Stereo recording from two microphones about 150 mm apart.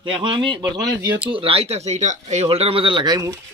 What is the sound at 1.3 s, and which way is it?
Speech, 40° right (ahead or behind).